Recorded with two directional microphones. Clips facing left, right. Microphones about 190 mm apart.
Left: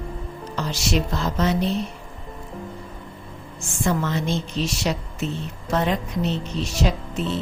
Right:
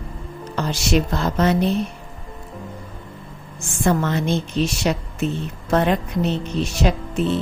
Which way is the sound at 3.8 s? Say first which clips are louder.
Right 4 dB; 55° right (ahead or behind).